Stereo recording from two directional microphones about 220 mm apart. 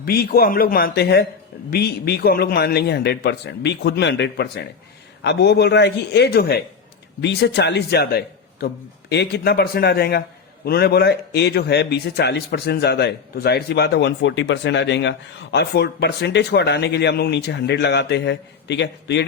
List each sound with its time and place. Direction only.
0.0 s a man's voice: 45° left (ahead or behind)